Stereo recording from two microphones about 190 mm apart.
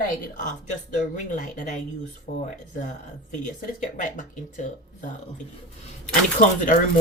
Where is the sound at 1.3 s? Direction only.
40° left (ahead or behind).